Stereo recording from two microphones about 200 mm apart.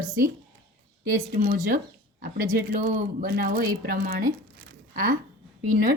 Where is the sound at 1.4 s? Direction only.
45° right (ahead or behind).